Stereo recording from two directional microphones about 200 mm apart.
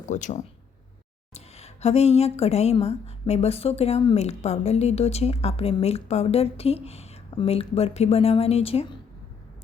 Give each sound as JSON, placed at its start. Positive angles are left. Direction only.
{"t": 0.1, "sound": "speech", "side_deg": 35}